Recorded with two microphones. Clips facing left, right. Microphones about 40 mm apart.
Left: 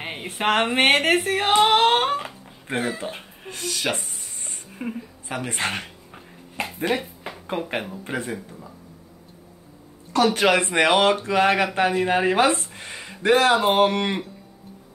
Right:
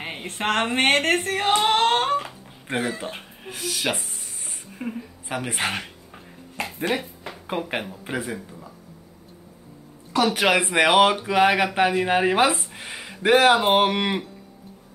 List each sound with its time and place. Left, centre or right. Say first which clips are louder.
0.0 s speech: left 2 dB; centre
6.5 s a sound: left 1 dB; centre
7.4 s speech: even; centre
10.1 s speech: left 1 dB; centre
13.2 s speech: right 1 dB; centre